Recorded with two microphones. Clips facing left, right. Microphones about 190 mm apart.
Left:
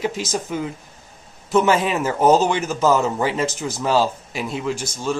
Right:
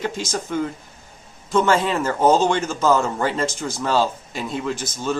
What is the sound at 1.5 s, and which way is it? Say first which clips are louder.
Speech: left 1 dB; 15° left (ahead or behind).